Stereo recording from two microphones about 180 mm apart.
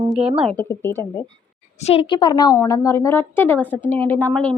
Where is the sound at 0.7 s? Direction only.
10° left (ahead or behind).